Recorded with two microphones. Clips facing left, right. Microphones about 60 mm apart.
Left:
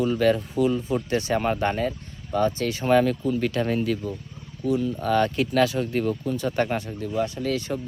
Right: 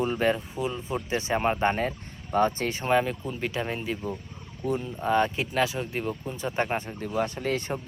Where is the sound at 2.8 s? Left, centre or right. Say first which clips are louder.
Left 5 dB; centre.